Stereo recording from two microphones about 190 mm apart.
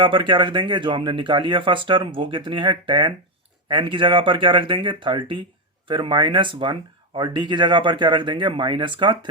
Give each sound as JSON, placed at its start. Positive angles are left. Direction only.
{"t": 0.0, "sound": "speech", "side_deg": -25}